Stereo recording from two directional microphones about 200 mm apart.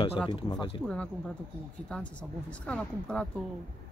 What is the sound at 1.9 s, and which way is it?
A woman's voice, 5° left (ahead or behind).